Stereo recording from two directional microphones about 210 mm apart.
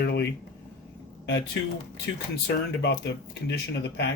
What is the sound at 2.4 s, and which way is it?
Speech, 55° left (ahead or behind).